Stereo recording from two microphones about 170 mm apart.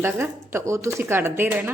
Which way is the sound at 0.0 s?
15° right (ahead or behind).